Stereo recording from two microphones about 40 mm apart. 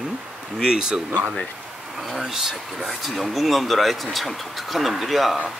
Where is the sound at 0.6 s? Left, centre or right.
Centre.